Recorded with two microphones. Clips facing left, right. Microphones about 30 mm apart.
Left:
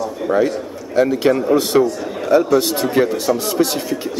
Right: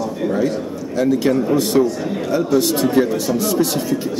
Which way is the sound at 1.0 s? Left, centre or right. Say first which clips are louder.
Left 2 dB; left.